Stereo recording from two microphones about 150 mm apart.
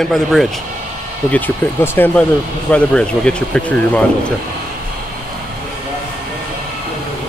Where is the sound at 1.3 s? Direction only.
10° left (ahead or behind).